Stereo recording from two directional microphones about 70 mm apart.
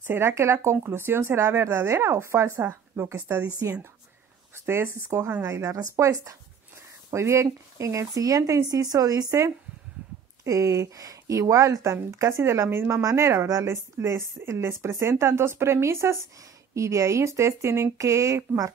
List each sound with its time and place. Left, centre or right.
0.0 s speech: right
0.3 s speech: right
3.4 s speech: right
4.6 s speech: right